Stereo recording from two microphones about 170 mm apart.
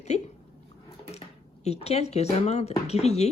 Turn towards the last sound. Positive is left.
turn(degrees=40)  # may be behind; listen again after turning